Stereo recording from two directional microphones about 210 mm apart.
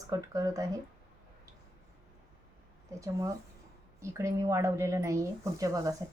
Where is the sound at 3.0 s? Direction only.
15° right (ahead or behind).